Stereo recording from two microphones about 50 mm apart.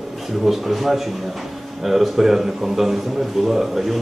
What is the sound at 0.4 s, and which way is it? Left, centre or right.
A man's voice, centre.